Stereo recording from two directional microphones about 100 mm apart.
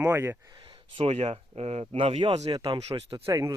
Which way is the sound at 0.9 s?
85° right.